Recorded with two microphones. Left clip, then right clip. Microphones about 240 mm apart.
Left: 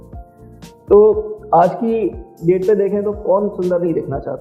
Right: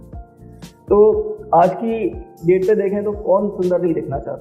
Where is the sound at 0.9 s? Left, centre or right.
Left.